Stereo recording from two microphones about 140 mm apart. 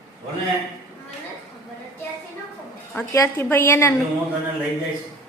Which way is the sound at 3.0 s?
20° left (ahead or behind).